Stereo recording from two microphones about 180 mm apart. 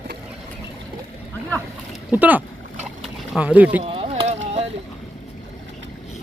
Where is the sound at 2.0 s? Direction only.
10° right (ahead or behind).